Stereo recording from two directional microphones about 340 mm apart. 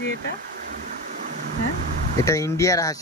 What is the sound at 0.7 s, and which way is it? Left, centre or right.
Vehicle, right.